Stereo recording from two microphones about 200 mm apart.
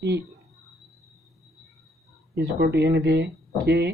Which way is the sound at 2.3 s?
55° right (ahead or behind).